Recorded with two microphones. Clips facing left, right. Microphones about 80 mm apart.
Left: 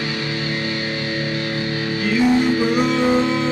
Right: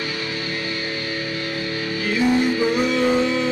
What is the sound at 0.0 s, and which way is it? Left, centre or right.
Music, left.